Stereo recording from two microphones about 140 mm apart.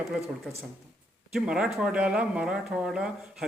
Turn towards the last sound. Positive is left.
turn(degrees=-5)  # may be behind; listen again after turning